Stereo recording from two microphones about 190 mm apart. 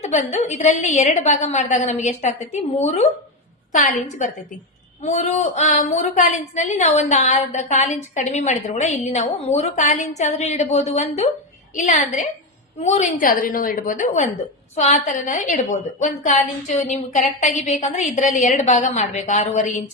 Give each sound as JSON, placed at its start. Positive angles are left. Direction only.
{"t": 0.0, "sound": "a woman's voice", "side_deg": 35}
{"t": 5.0, "sound": "a woman's voice", "side_deg": 35}